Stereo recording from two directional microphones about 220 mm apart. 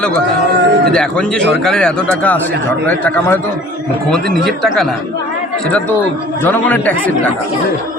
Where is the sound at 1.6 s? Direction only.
5° left (ahead or behind).